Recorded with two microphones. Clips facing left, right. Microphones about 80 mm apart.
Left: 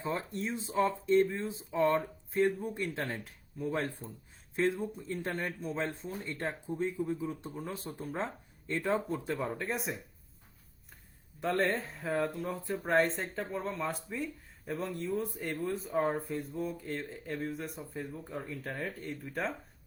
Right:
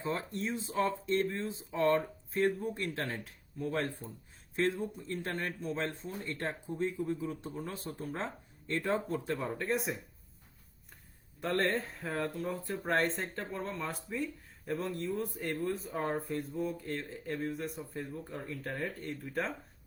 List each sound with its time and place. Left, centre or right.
0.3 s speech: centre
3.8 s speech: left
4.5 s speech: centre
11.3 s speech: centre